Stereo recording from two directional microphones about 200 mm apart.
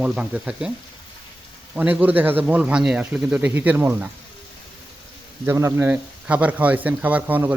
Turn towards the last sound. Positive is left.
turn(degrees=-10)  # may be behind; listen again after turning